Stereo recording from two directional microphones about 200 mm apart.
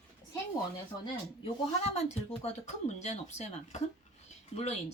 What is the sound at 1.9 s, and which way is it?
Speech, 30° left (ahead or behind).